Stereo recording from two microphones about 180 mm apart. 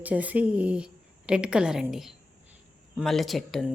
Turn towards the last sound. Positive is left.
turn(degrees=0)  # may be behind; listen again after turning